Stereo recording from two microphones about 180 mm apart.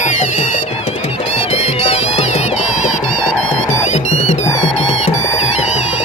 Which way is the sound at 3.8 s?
40° left (ahead or behind).